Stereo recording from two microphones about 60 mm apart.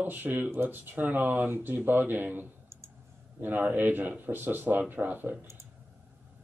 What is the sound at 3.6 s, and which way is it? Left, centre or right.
Speech, right.